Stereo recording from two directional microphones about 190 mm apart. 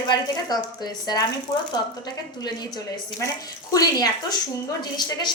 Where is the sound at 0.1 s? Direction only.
20° left (ahead or behind).